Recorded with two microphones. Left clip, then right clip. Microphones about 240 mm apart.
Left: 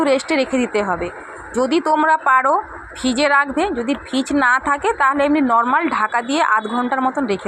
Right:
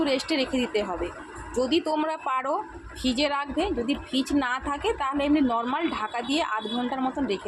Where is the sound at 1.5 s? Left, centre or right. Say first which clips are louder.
Left 9 dB; left.